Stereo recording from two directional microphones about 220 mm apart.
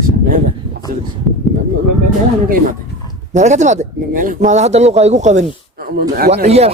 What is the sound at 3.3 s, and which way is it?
Speech, 30° right (ahead or behind).